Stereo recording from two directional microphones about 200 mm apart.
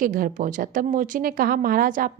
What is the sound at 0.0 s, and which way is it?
A woman's voice, 40° right (ahead or behind).